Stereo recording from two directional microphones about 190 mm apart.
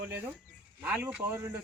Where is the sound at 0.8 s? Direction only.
5° right (ahead or behind).